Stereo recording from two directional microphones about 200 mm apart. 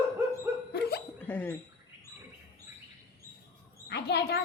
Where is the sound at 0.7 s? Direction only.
55° left (ahead or behind).